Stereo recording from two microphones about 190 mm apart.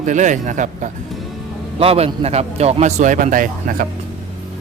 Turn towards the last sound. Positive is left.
turn(degrees=-45)  # may be behind; listen again after turning